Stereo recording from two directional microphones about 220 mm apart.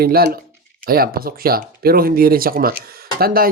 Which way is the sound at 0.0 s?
45° right (ahead or behind).